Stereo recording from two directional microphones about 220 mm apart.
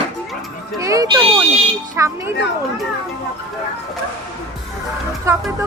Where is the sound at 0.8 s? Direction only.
15° right (ahead or behind).